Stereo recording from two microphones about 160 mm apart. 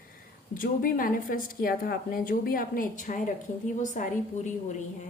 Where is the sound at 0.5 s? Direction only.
60° left (ahead or behind).